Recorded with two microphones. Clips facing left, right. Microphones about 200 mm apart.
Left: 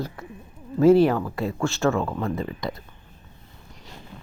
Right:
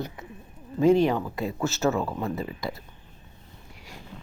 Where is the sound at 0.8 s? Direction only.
5° left (ahead or behind).